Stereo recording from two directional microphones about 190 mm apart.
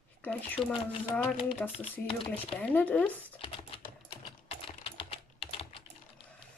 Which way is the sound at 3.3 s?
30° left (ahead or behind).